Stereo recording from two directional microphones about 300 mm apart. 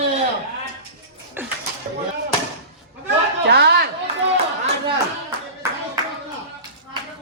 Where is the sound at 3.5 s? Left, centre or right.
Right.